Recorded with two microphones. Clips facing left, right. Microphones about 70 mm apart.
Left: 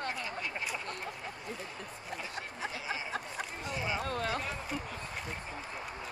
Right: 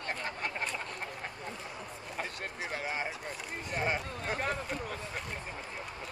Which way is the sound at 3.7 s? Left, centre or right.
Right.